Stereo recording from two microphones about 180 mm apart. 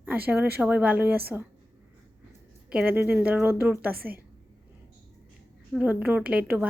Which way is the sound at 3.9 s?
55° right (ahead or behind).